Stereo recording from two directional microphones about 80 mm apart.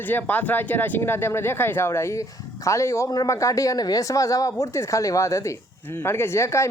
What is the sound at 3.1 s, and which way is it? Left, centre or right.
A man's voice, left.